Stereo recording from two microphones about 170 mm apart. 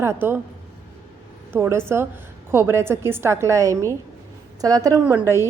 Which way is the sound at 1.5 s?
10° right (ahead or behind).